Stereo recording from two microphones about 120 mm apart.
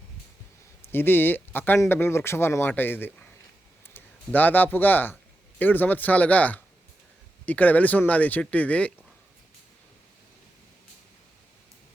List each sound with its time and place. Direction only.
0.9 s speech: 20° left (ahead or behind)